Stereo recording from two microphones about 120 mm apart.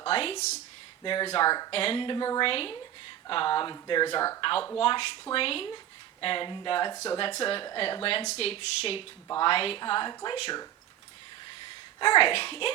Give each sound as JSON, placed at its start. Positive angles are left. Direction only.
{"t": 0.0, "sound": "a woman's voice", "side_deg": 50}
{"t": 1.0, "sound": "speech", "side_deg": 45}
{"t": 1.7, "sound": "a woman's voice", "side_deg": 50}
{"t": 4.4, "sound": "a woman's voice", "side_deg": 45}
{"t": 6.9, "sound": "speech", "side_deg": 25}
{"t": 7.2, "sound": "a woman's voice", "side_deg": 50}
{"t": 11.9, "sound": "a woman's voice", "side_deg": 45}